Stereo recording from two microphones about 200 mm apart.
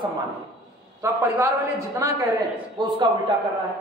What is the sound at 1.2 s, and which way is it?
A woman's voice, 15° right (ahead or behind).